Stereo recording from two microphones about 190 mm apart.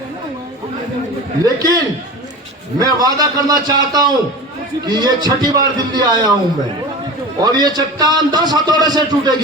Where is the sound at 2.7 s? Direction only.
20° right (ahead or behind).